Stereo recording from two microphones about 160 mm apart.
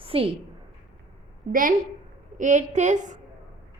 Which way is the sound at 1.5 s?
60° right (ahead or behind).